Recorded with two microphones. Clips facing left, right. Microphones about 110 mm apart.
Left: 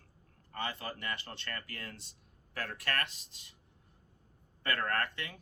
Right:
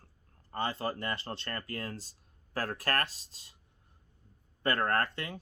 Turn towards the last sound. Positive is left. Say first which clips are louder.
# right 4 dB
turn(degrees=-35)  # may be behind; listen again after turning